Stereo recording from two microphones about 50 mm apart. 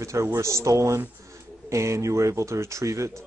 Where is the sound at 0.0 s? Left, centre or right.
Right.